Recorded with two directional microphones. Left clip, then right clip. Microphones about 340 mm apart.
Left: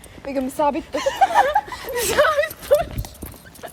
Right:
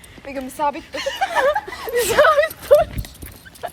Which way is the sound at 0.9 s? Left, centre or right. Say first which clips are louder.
Left 4 dB; left.